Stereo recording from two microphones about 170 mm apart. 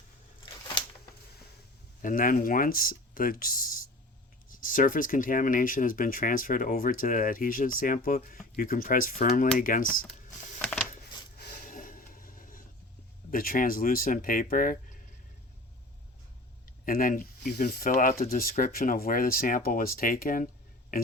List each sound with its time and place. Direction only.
2.0 s speech: 55° left (ahead or behind)
10.6 s a sound: 5° left (ahead or behind)
11.3 s a sound: 55° left (ahead or behind)
13.3 s speech: 55° left (ahead or behind)
16.6 s speech: 55° left (ahead or behind)
17.5 s speech: 65° left (ahead or behind)